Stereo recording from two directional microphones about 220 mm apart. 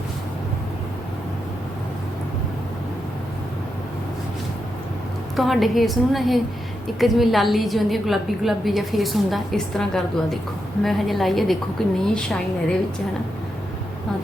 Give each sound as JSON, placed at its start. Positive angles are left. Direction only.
{"t": 5.4, "sound": "a woman's voice", "side_deg": 0}